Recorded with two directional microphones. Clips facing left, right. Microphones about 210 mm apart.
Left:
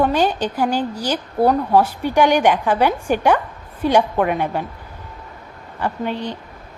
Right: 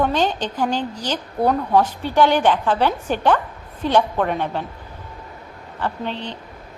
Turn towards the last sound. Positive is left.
turn(degrees=10)  # may be behind; listen again after turning